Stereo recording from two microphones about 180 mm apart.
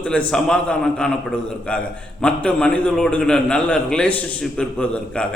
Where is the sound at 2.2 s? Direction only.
5° left (ahead or behind).